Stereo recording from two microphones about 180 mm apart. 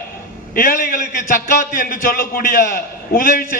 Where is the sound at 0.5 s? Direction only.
50° left (ahead or behind).